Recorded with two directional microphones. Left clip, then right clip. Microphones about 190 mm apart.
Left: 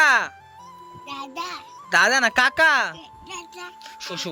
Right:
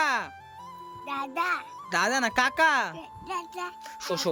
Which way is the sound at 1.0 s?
15° right (ahead or behind).